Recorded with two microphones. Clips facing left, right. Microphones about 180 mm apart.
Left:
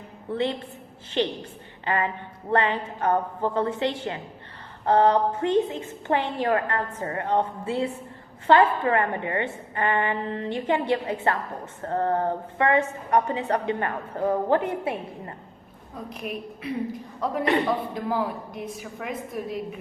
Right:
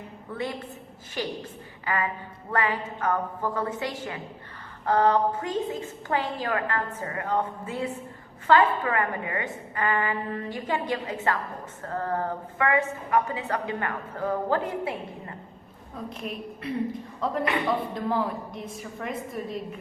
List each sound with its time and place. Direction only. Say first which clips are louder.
0.3 s a woman's voice: left 6 dB; 25° left (ahead or behind)
1.8 s a woman's voice: left 3 dB; 30° left (ahead or behind)
16.0 s a woman's voice: left 2 dB; centre (ahead or behind)